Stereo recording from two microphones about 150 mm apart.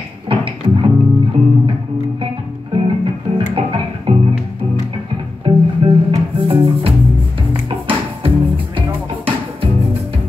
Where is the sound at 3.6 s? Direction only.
35° right (ahead or behind).